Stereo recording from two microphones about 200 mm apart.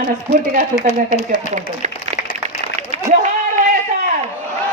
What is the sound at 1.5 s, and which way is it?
Speech, 35° right (ahead or behind).